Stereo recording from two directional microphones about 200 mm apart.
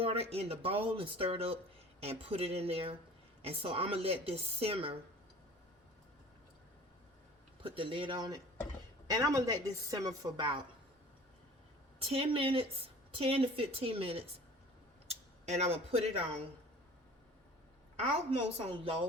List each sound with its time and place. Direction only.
0.0 s speech: 30° right (ahead or behind)
7.6 s speech: 25° right (ahead or behind)
11.9 s speech: 30° right (ahead or behind)
18.3 s a woman's voice: 30° right (ahead or behind)